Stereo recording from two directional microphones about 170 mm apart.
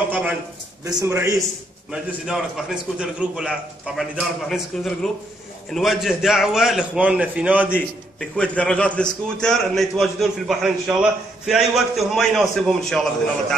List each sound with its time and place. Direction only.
0.1 s a sound: 10° right (ahead or behind)
0.8 s a man's voice: 15° right (ahead or behind)
1.9 s a man's voice: centre (ahead or behind)
8.2 s a man's voice: 5° left (ahead or behind)